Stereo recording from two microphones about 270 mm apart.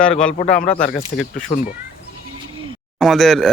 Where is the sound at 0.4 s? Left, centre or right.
Left.